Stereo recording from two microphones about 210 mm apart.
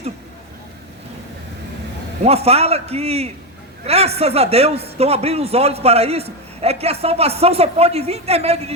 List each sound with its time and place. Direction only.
2.2 s a man's voice: 30° right (ahead or behind)